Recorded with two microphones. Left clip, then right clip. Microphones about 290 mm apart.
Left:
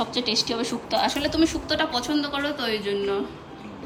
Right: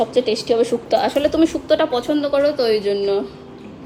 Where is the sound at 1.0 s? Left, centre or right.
Centre.